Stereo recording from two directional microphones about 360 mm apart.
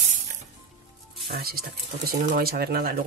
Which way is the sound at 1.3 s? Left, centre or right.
Right.